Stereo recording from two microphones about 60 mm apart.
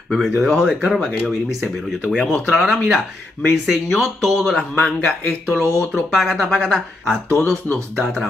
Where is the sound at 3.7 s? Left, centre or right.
Centre.